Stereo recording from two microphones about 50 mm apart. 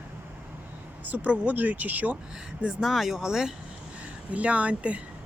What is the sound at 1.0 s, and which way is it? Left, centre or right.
Speech, right.